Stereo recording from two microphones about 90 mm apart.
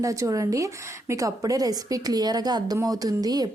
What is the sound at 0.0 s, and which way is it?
A woman's voice, 40° right (ahead or behind).